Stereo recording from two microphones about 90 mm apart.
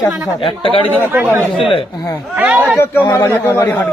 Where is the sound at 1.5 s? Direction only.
90° left.